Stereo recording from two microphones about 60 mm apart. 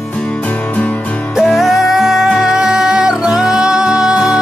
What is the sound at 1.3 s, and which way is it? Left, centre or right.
Music, centre.